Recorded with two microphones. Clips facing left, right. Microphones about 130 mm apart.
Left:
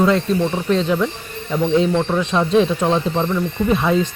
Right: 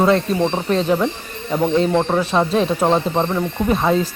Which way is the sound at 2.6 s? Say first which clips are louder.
Right 1 dB; 35° right (ahead or behind).